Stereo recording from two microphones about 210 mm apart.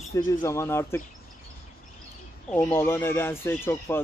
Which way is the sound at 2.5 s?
10° left (ahead or behind).